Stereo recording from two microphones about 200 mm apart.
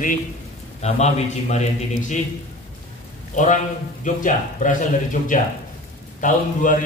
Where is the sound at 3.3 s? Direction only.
40° left (ahead or behind).